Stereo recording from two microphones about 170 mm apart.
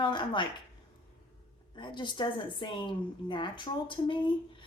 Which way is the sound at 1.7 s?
25° left (ahead or behind).